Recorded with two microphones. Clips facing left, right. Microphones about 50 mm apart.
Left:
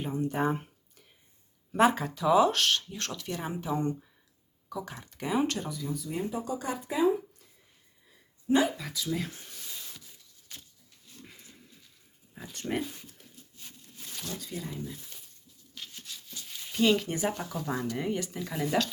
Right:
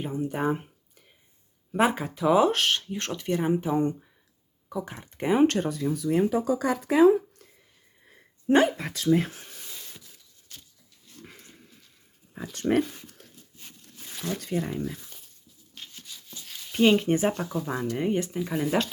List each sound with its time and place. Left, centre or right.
0.0 s speech: centre
5.1 s speech: right
6.0 s speech: right
8.0 s speech: right
12.3 s speech: right
14.3 s speech: right
16.7 s speech: right
17.3 s speech: centre; by 18.3 s right
18.3 s speech: centre